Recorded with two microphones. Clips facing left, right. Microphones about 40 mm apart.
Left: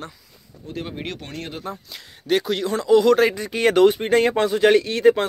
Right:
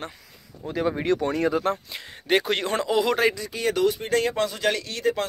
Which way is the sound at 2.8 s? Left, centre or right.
Centre.